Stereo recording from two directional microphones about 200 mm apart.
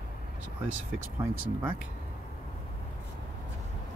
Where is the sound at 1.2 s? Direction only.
10° right (ahead or behind).